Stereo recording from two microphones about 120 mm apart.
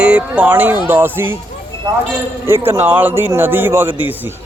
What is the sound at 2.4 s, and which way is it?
Speech, 20° right (ahead or behind).